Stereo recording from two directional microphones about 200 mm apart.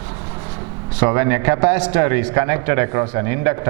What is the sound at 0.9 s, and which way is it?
A man's voice, 15° right (ahead or behind).